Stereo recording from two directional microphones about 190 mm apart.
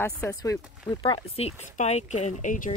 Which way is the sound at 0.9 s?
25° left (ahead or behind).